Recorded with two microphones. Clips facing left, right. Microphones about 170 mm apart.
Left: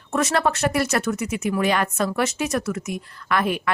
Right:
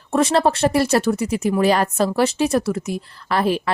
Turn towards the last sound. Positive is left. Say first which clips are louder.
# right 3 dB
turn(degrees=-30)  # may be behind; listen again after turning